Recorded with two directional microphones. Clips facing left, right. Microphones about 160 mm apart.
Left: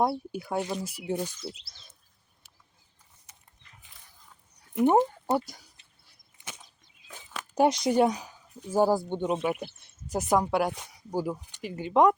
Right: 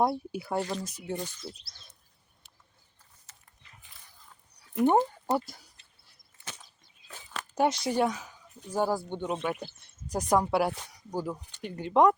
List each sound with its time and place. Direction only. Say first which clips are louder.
0.0 s speech: even; centre (ahead or behind)
0.6 s speech: left 1 dB; 10° left (ahead or behind)
4.9 s speech: left 2 dB; 5° left (ahead or behind)
6.4 s a sound: even; 15° left (ahead or behind)
8.7 s speech: left 5 dB; 15° left (ahead or behind)